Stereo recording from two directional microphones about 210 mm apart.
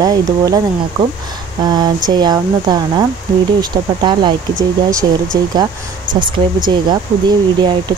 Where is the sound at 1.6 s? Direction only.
20° right (ahead or behind).